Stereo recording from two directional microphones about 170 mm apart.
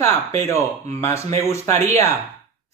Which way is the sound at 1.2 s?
40° right (ahead or behind).